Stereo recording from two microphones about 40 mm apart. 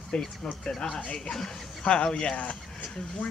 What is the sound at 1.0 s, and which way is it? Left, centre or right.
Speech, left.